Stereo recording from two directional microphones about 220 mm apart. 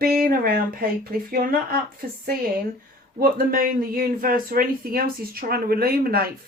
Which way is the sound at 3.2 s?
40° right (ahead or behind).